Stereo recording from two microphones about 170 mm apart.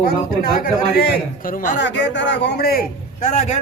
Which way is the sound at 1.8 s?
90° left.